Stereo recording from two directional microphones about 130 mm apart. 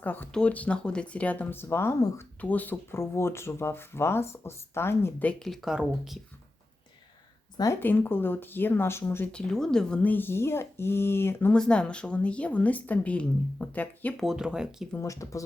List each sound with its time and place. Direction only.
0.0 s speech: 15° left (ahead or behind); by 6.1 s 5° right (ahead or behind)
7.5 s speech: 25° left (ahead or behind)
7.8 s speech: 15° left (ahead or behind)
9.3 s speech: 5° left (ahead or behind)
14.2 s speech: 5° right (ahead or behind)
14.9 s speech: 25° left (ahead or behind)